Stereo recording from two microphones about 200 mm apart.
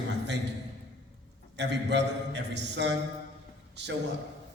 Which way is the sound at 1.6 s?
60° right (ahead or behind).